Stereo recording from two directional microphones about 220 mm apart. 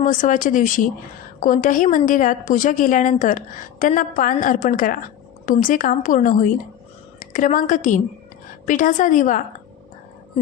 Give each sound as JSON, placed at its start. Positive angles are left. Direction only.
{"t": 0.0, "sound": "a woman's voice", "side_deg": 35}